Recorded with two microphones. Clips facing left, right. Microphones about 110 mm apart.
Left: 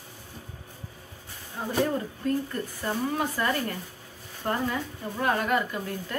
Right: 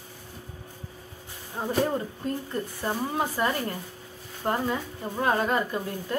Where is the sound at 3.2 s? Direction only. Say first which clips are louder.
Right 1 dB; 20° right (ahead or behind).